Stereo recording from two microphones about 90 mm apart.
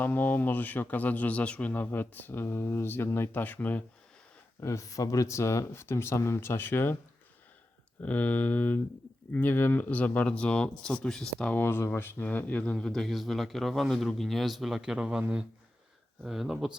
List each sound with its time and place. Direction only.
0.0 s speech: 20° left (ahead or behind)
4.6 s speech: 35° left (ahead or behind)
8.0 s speech: 15° left (ahead or behind)
11.5 s speech: 25° left (ahead or behind)
12.7 s speech: 5° left (ahead or behind)